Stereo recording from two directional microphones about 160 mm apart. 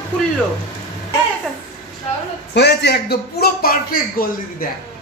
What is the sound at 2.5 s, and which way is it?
A man's voice, 90° left.